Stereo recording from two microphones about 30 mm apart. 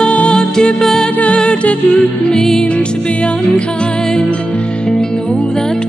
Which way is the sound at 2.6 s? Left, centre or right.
Left.